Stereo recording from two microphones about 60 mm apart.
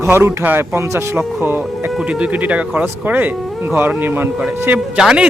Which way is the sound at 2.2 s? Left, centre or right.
Right.